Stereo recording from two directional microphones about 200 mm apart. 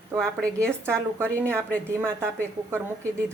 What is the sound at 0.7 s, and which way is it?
A woman's voice, 10° right (ahead or behind).